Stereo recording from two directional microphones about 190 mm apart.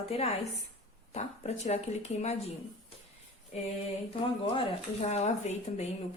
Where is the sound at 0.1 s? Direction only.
30° left (ahead or behind).